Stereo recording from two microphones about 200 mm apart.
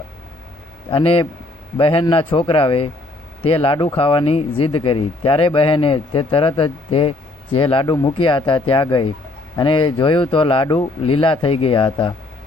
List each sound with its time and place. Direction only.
0.9 s a man's voice: 25° left (ahead or behind)